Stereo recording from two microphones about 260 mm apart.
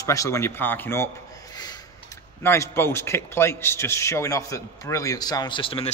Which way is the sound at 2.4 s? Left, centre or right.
Centre.